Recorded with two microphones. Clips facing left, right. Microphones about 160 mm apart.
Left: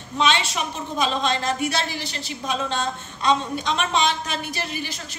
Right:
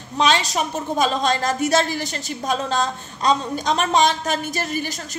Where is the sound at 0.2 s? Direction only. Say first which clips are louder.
Right 3 dB; 40° right (ahead or behind).